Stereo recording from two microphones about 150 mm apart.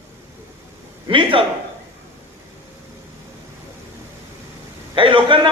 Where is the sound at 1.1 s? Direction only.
35° right (ahead or behind).